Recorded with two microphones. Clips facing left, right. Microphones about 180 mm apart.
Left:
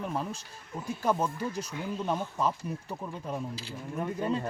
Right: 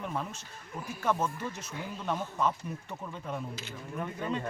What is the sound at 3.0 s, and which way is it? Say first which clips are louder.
Speech: left 1 dB; 25° left (ahead or behind).